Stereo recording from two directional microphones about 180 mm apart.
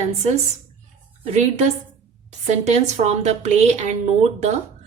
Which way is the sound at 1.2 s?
35° right (ahead or behind).